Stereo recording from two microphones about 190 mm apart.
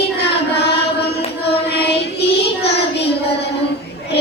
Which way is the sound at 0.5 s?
60° left (ahead or behind).